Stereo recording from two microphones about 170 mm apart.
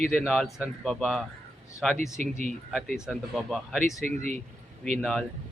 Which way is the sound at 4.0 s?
45° right (ahead or behind).